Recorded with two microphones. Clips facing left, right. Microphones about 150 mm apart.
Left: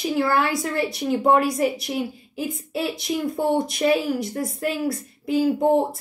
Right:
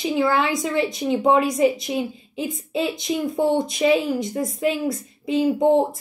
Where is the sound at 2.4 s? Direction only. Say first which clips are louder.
Right 2 dB; 5° left (ahead or behind).